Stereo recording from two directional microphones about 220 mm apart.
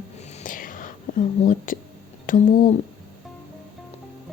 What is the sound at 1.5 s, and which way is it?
Speech, 40° left (ahead or behind).